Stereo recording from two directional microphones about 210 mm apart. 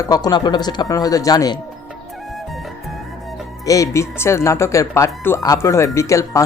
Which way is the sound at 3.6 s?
15° left (ahead or behind).